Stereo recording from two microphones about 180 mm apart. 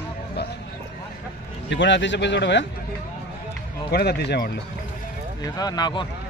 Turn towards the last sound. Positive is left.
turn(degrees=25)  # may be behind; listen again after turning